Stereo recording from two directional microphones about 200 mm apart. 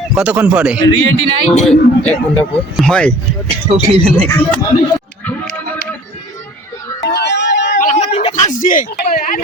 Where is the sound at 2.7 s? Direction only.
Centre (ahead or behind).